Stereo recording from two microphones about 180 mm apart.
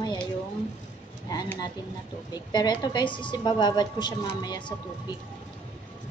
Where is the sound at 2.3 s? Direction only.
20° left (ahead or behind).